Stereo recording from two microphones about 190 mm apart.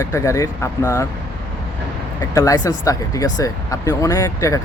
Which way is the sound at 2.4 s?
20° left (ahead or behind).